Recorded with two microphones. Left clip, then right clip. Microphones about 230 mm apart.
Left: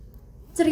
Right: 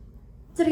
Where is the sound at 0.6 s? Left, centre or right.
Left.